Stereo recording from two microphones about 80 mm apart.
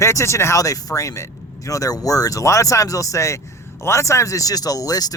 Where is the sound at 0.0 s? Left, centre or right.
Left.